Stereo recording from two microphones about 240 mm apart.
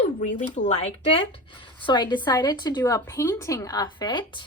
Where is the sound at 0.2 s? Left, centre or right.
Left.